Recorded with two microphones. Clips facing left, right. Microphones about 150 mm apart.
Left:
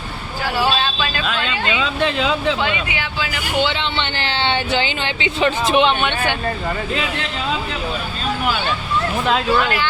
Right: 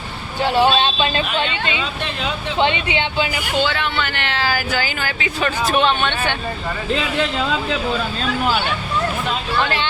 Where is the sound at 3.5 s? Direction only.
20° left (ahead or behind).